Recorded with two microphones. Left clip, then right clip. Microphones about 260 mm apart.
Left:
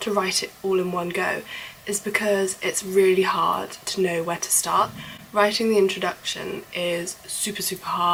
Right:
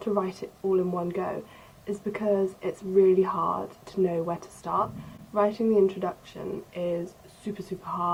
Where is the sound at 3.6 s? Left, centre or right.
Centre.